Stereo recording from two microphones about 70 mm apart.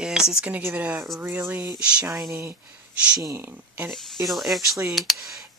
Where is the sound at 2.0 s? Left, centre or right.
Right.